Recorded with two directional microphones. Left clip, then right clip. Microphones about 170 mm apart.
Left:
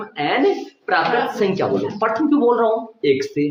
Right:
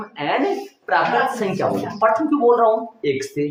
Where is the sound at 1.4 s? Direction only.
35° left (ahead or behind).